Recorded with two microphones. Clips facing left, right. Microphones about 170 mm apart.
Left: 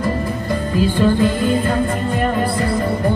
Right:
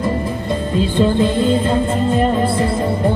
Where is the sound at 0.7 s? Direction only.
25° right (ahead or behind).